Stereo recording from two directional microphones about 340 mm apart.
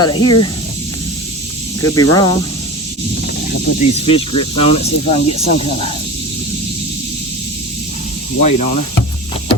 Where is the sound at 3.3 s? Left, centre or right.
Left.